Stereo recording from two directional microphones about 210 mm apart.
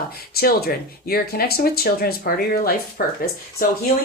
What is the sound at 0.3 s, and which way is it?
Speech, 45° left (ahead or behind).